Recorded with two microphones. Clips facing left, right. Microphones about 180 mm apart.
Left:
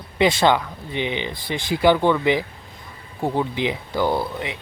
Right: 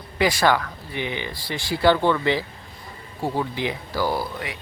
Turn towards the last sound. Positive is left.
turn(degrees=20)  # may be behind; listen again after turning